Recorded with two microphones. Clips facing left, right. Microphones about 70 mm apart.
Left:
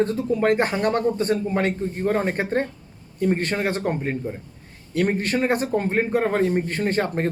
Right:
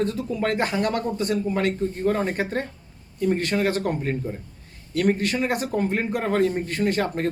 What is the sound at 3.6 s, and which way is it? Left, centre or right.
Speech, left.